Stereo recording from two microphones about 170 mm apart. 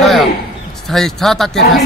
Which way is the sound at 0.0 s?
Centre (ahead or behind).